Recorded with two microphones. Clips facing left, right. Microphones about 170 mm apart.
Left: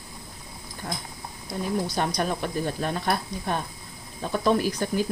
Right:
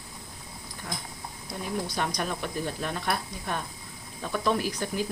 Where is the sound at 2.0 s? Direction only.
40° left (ahead or behind).